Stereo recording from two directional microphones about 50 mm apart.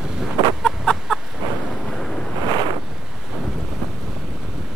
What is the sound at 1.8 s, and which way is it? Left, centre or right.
Waves, centre.